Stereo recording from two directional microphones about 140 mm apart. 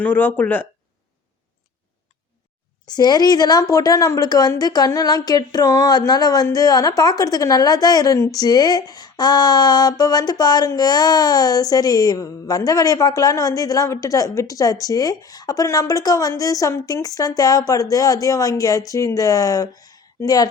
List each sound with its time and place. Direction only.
0.0 s speech: 15° left (ahead or behind)
2.9 s a woman's voice: 30° left (ahead or behind)